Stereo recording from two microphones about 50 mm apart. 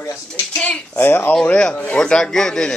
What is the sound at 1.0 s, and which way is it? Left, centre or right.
Speech, left.